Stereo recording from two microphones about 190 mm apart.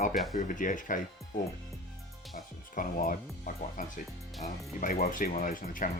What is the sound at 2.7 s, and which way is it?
Speech, 45° left (ahead or behind).